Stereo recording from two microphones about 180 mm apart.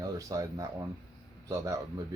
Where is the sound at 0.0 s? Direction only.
20° right (ahead or behind).